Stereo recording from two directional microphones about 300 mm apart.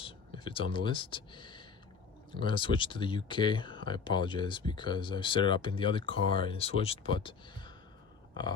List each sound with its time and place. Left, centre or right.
0.0 s speech: centre